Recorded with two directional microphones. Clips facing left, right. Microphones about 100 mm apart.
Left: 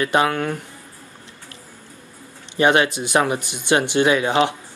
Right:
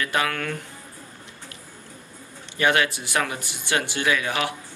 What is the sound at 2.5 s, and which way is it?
Speech, 25° left (ahead or behind).